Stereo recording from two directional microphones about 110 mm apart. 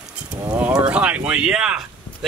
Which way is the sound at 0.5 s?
15° right (ahead or behind).